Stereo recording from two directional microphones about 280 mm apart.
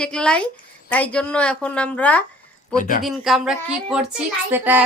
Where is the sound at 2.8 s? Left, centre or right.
Left.